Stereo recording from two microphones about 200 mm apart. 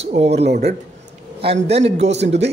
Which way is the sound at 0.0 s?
30° right (ahead or behind).